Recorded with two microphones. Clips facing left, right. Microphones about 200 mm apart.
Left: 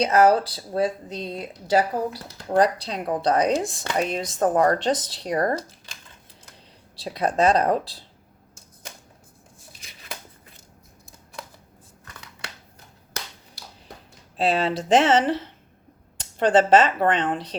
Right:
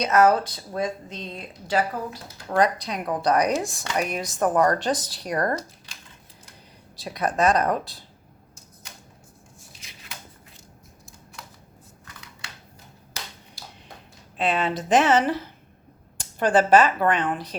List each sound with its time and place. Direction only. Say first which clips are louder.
0.0 s speech: left 1 dB; 30° left (ahead or behind)
7.0 s speech: left 2 dB; 25° left (ahead or behind)
14.3 s speech: left 2 dB; 30° left (ahead or behind)